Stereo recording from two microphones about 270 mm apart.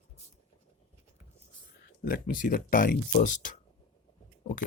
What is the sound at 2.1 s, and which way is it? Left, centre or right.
Speech, left.